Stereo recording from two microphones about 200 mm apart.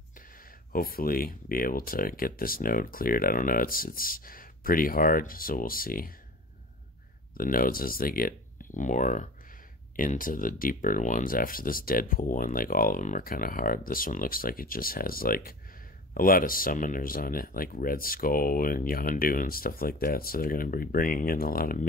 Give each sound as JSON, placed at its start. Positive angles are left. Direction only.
{"t": 0.4, "sound": "speech", "side_deg": 45}
{"t": 7.3, "sound": "speech", "side_deg": 45}